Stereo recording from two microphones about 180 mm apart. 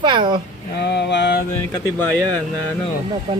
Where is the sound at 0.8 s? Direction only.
70° left (ahead or behind).